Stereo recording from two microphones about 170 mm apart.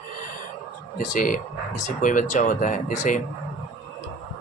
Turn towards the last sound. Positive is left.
turn(degrees=50)  # may be behind; listen again after turning